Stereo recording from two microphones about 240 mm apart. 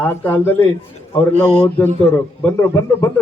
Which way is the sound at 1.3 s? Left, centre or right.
Right.